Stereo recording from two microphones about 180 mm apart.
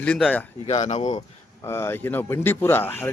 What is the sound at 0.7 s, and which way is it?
Speech, 40° left (ahead or behind).